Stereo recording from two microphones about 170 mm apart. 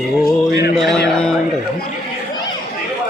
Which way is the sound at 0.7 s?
Centre (ahead or behind).